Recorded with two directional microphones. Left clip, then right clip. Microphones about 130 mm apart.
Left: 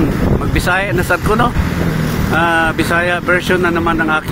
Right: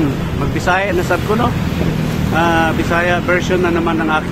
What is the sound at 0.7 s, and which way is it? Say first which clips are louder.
Speech: even; 20° left (ahead or behind).